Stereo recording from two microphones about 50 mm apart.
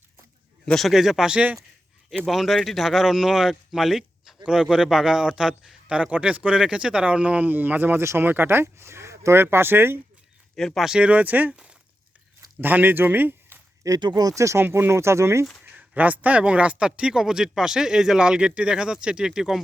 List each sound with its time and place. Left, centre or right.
0.6 s a man's voice: centre
0.9 s speech: centre
3.7 s a sound: centre
4.4 s a man's voice: centre; by 10.0 s right
10.8 s speech: centre
11.0 s speech: right
11.5 s a sound: centre
12.5 s speech: right
14.3 s speech: right
14.6 s speech: right
15.6 s speech: right; by 19.6 s centre